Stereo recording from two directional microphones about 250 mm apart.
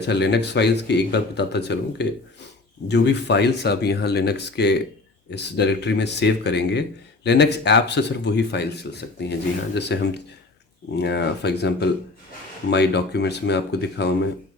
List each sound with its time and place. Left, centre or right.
0.0 s speech: left